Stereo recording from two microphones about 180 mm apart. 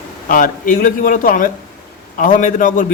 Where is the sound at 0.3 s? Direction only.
50° left (ahead or behind).